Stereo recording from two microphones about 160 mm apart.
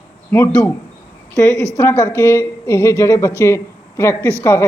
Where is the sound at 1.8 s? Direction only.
20° left (ahead or behind).